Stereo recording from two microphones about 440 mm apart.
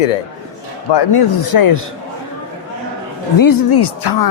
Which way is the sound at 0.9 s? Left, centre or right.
Left.